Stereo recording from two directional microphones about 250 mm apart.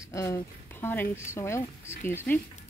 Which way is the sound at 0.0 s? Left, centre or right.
Centre.